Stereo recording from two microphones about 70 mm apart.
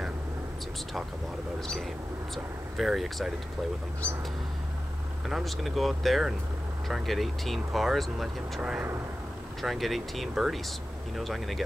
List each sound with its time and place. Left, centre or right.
2.3 s speech: centre
5.3 s speech: centre
8.5 s speech: centre
9.6 s speech: centre